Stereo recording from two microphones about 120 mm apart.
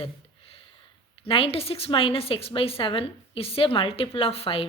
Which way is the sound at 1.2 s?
55° left (ahead or behind).